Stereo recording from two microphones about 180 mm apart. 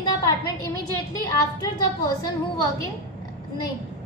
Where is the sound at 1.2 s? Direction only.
20° left (ahead or behind).